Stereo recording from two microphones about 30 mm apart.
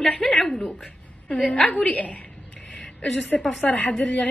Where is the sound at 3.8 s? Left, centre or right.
Left.